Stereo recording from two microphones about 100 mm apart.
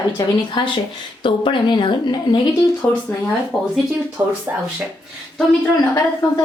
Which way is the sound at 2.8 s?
25° left (ahead or behind).